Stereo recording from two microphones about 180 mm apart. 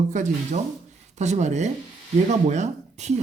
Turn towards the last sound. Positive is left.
turn(degrees=-40)  # may be behind; listen again after turning